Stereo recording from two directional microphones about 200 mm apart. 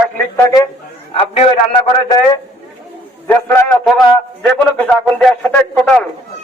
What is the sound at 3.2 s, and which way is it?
Speech, 10° left (ahead or behind).